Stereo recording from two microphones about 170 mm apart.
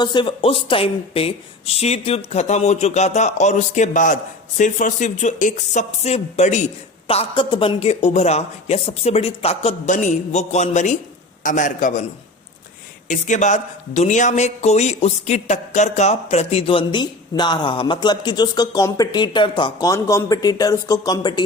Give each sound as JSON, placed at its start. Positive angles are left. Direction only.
{"t": 0.0, "sound": "a woman's voice", "side_deg": 25}
{"t": 13.1, "sound": "a man's voice", "side_deg": 45}